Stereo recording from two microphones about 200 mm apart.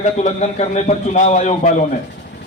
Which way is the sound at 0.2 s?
35° left (ahead or behind).